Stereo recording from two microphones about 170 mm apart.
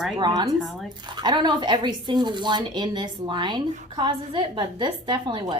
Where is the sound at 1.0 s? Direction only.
25° right (ahead or behind).